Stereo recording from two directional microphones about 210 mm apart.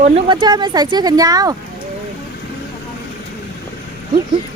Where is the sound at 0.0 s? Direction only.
25° right (ahead or behind).